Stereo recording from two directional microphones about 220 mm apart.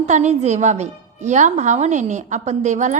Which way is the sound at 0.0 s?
30° right (ahead or behind).